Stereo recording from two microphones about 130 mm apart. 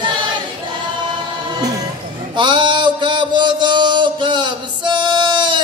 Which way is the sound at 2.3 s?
40° right (ahead or behind).